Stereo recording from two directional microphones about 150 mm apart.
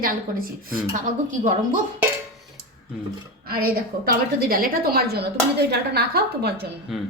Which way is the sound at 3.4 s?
80° right.